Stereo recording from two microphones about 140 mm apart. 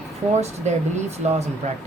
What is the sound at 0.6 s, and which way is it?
Speech, 55° right (ahead or behind).